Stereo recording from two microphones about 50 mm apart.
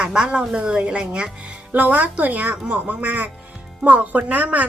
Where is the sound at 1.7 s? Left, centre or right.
Right.